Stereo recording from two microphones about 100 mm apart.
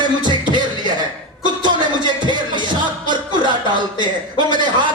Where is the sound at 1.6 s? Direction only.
50° right (ahead or behind).